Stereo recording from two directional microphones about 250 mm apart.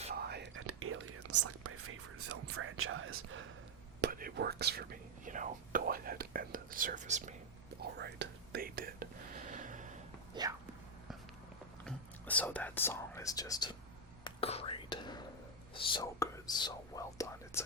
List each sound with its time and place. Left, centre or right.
0.1 s whispering: right
4.0 s whispering: right
7.8 s whispering: right
10.4 s whispering: centre
11.9 s whispering: centre